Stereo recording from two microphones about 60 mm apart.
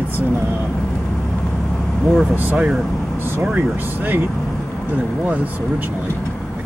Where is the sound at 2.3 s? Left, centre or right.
Right.